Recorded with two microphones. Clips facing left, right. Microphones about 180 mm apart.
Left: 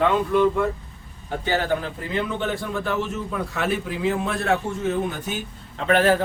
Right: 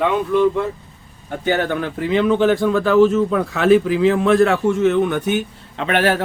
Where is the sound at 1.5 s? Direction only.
65° right (ahead or behind).